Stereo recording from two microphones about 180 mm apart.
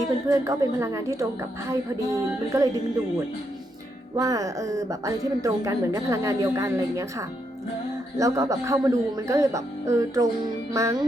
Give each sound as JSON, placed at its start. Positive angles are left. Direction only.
{"t": 0.3, "sound": "speech", "side_deg": -15}
{"t": 4.2, "sound": "speech", "side_deg": -20}